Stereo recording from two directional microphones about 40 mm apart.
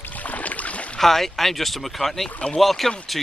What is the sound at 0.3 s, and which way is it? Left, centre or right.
Boat, left.